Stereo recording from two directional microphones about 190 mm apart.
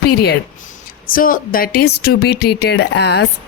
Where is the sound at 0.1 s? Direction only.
55° left (ahead or behind).